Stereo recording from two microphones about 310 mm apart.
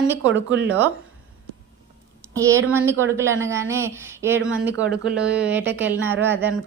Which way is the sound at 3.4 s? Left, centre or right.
Centre.